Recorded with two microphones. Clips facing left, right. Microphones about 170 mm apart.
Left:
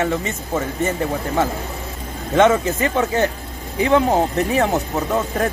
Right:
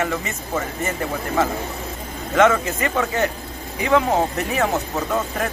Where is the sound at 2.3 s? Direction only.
20° left (ahead or behind).